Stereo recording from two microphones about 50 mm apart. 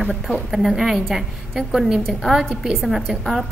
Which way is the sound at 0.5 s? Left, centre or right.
Centre.